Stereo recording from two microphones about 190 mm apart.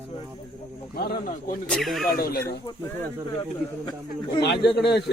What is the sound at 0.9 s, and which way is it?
Speech, 50° left (ahead or behind).